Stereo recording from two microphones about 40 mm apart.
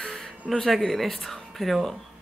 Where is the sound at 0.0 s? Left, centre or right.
Centre.